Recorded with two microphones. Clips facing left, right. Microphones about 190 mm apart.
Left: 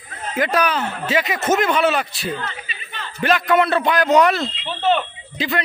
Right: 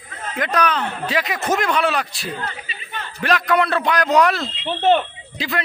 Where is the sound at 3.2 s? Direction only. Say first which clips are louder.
Left 2 dB; centre (ahead or behind).